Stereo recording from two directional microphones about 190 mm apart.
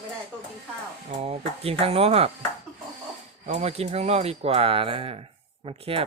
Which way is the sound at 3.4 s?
35° right (ahead or behind).